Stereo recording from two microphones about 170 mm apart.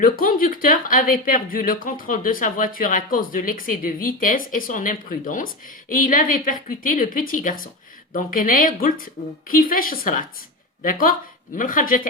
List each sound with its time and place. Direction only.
0.0 s a woman's voice: 55° left (ahead or behind)